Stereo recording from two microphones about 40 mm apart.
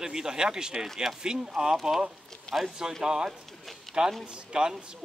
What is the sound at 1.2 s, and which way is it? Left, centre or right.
Speech, centre.